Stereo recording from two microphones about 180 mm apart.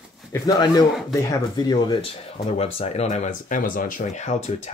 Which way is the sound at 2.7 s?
35° left (ahead or behind).